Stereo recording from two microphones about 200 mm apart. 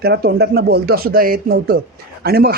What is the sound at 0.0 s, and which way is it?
A man's voice, 50° right (ahead or behind).